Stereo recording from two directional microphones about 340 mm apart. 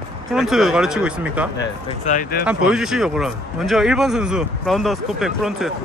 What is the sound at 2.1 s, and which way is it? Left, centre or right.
Speech, left.